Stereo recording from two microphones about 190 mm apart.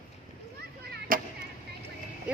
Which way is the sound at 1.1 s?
45° right (ahead or behind).